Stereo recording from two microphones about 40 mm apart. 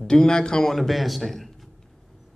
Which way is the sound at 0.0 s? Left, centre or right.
Centre.